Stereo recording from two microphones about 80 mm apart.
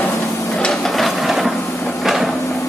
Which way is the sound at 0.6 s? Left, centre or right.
Centre.